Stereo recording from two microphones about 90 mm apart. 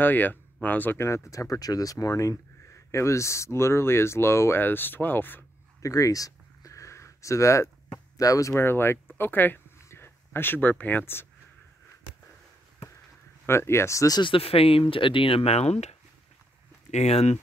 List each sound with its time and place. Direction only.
0.0 s speech: 20° left (ahead or behind)
5.8 s a sound: 40° left (ahead or behind)
8.2 s speech: 40° left (ahead or behind); by 11.2 s 25° left (ahead or behind)
13.5 s speech: 30° left (ahead or behind)
14.2 s speech: 85° left